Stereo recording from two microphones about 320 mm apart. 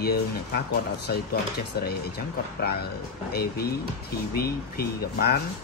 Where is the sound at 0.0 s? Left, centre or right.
Left.